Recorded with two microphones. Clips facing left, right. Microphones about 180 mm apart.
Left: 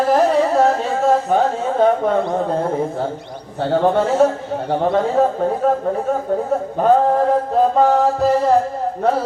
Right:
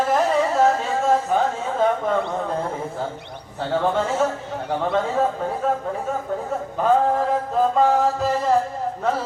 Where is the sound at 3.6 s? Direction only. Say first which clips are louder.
Left 6 dB; 35° left (ahead or behind).